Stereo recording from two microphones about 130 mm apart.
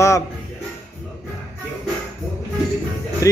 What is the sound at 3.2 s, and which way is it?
Speech, 25° left (ahead or behind).